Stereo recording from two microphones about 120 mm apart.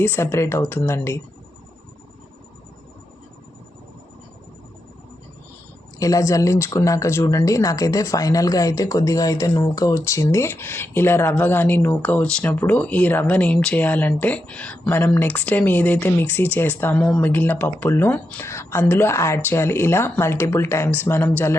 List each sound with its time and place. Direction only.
0.0 s speech: 20° left (ahead or behind)
6.0 s speech: 30° left (ahead or behind)